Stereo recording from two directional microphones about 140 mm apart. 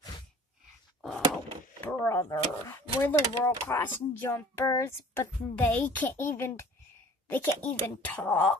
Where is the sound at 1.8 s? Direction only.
15° left (ahead or behind).